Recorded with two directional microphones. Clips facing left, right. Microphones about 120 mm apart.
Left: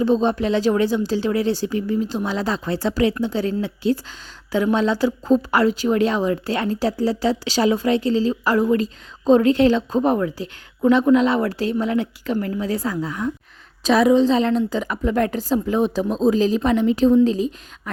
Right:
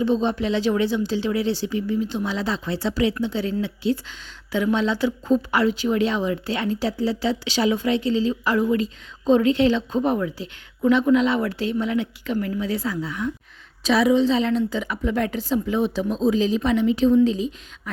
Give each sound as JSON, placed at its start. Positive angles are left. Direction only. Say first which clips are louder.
{"t": 0.0, "sound": "a woman's voice", "louder": "left 3 dB", "side_deg": 40}